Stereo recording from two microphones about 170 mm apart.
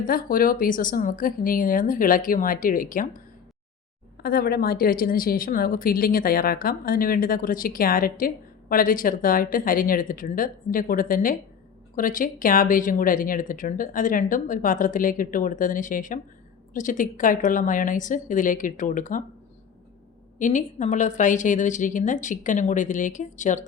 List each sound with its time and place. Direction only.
0.0 s speech: 55° left (ahead or behind)
4.2 s a woman's voice: 60° left (ahead or behind)
20.4 s speech: 50° left (ahead or behind)